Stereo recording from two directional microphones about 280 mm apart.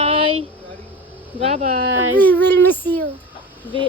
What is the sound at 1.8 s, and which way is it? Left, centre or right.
Speech, right.